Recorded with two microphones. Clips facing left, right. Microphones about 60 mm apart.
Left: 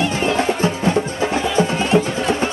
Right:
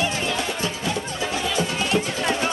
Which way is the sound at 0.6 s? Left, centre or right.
Left.